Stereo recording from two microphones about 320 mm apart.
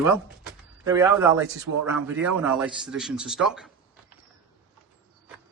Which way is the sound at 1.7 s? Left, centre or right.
Right.